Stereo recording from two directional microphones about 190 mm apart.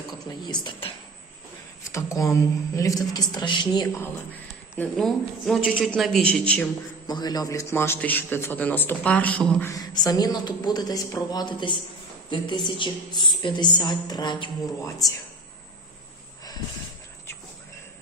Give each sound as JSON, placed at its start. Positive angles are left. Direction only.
{"t": 0.1, "sound": "a woman's voice", "side_deg": 20}
{"t": 1.9, "sound": "a man's voice", "side_deg": 15}
{"t": 4.7, "sound": "speech", "side_deg": 5}
{"t": 7.1, "sound": "a man's voice", "side_deg": 20}